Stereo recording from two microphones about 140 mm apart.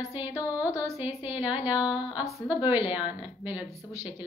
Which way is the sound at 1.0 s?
10° right (ahead or behind).